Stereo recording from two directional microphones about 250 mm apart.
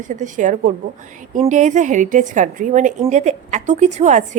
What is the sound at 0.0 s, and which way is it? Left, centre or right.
A woman's voice, right.